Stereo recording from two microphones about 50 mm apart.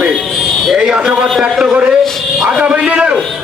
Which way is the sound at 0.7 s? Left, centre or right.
Centre.